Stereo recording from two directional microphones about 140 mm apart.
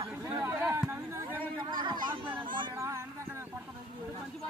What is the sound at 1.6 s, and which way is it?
Speech, 35° right (ahead or behind).